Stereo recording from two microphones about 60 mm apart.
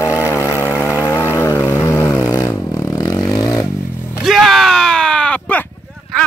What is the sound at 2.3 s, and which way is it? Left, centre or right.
Vehicle, left.